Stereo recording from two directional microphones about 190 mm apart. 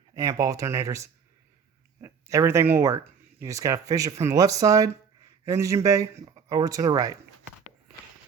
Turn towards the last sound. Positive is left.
turn(degrees=-20)  # may be behind; listen again after turning